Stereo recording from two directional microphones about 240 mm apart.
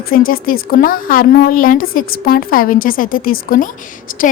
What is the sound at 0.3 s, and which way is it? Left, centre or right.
A woman's voice, left.